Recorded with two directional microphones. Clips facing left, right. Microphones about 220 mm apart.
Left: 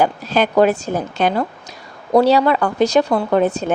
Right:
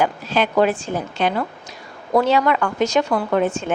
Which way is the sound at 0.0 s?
40° left (ahead or behind).